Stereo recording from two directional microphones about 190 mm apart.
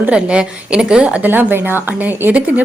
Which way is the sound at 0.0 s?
5° right (ahead or behind).